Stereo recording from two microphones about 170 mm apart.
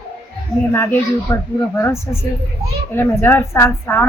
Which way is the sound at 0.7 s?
15° left (ahead or behind).